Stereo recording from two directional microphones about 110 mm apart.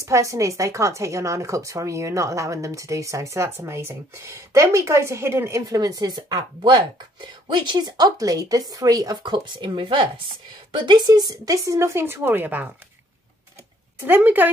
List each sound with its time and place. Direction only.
0.0 s speech: 30° right (ahead or behind)
5.7 s speech: 35° right (ahead or behind); by 10.2 s 55° right (ahead or behind)
10.7 s speech: 40° right (ahead or behind); by 12.6 s 15° right (ahead or behind)
13.9 s a woman's voice: 20° right (ahead or behind)